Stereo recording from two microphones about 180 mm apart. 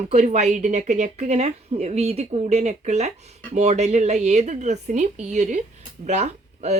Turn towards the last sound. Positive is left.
turn(degrees=-40)  # may be behind; listen again after turning